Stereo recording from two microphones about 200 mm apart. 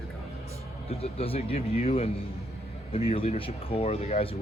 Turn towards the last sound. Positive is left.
turn(degrees=30)  # may be behind; listen again after turning